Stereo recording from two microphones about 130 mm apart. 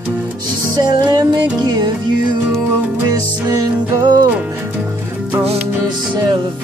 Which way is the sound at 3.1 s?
30° right (ahead or behind).